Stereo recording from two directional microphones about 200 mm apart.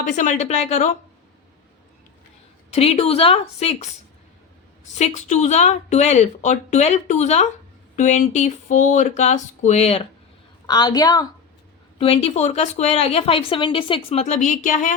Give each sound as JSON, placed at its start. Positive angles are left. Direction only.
{"t": 0.0, "sound": "a woman's voice", "side_deg": 40}
{"t": 2.6, "sound": "a woman's voice", "side_deg": 30}
{"t": 4.9, "sound": "a woman's voice", "side_deg": 35}
{"t": 10.7, "sound": "a woman's voice", "side_deg": 20}
{"t": 11.9, "sound": "a woman's voice", "side_deg": 30}